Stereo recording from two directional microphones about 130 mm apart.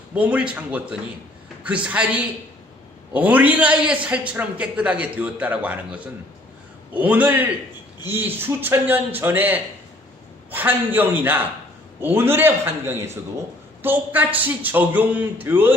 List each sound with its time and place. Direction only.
0.1 s a man's voice: 10° right (ahead or behind)